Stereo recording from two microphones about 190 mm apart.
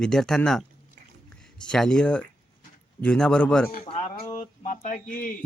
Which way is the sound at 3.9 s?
35° left (ahead or behind).